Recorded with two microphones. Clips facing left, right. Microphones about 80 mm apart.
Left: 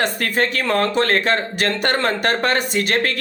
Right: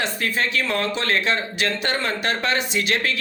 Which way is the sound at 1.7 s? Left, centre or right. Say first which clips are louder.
Left 7 dB; left.